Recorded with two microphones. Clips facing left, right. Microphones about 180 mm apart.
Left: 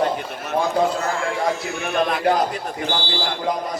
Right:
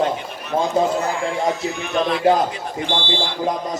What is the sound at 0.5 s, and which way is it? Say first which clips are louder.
Speech: right 1 dB; 15° right (ahead or behind).